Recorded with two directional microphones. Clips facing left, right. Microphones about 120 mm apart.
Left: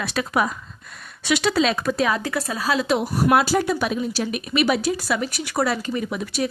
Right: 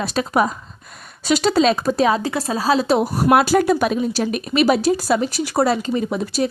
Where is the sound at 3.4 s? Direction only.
55° right (ahead or behind).